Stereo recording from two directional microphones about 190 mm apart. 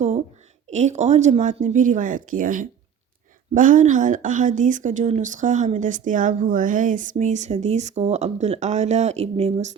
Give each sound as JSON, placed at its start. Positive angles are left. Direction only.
{"t": 0.7, "sound": "speech", "side_deg": -35}